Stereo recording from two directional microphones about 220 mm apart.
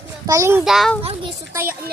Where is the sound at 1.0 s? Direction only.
25° right (ahead or behind).